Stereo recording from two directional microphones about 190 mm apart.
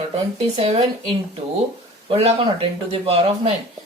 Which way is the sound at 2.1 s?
30° right (ahead or behind).